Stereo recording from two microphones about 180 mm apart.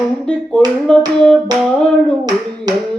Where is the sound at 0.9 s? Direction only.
5° left (ahead or behind).